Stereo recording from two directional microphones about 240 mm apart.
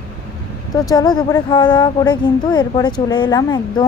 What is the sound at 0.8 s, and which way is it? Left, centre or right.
Speech, centre.